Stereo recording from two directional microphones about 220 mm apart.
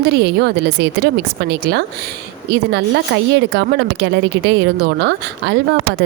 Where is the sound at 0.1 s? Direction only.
50° right (ahead or behind).